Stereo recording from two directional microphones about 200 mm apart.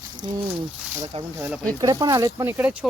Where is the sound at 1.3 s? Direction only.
10° right (ahead or behind).